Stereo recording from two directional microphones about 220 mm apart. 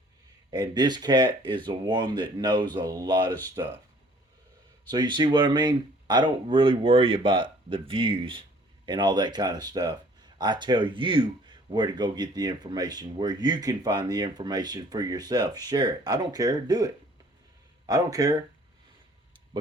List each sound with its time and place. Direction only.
0.5 s speech: 20° right (ahead or behind)
4.9 s speech: 20° right (ahead or behind)